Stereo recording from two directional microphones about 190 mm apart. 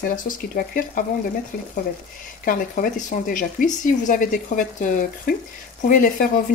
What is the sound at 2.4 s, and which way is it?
Speech, 45° left (ahead or behind).